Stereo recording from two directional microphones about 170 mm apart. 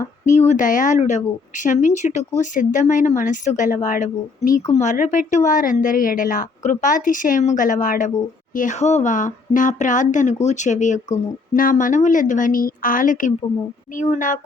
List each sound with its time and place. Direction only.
0.3 s speech: 45° left (ahead or behind)